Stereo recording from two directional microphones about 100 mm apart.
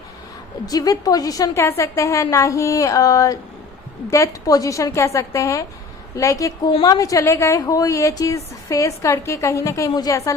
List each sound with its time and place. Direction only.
0.6 s a woman's voice: 40° left (ahead or behind)